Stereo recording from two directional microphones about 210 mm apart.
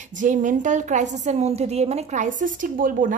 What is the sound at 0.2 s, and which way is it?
Speech, 35° right (ahead or behind).